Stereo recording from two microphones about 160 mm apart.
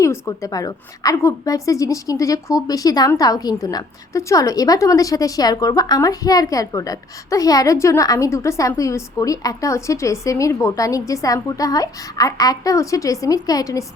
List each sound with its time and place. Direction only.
0.0 s a woman's voice: 20° left (ahead or behind)